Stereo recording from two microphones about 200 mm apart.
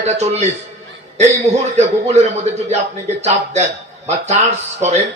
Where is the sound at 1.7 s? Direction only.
30° right (ahead or behind).